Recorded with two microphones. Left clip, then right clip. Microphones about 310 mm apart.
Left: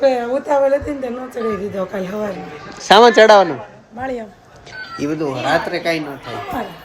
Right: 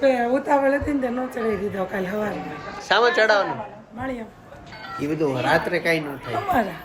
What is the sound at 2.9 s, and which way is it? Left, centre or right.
Speech, left.